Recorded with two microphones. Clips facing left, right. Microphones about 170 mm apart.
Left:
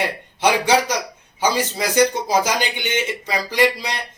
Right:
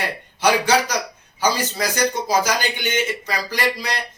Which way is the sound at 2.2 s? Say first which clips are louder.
Left 1 dB; 25° left (ahead or behind).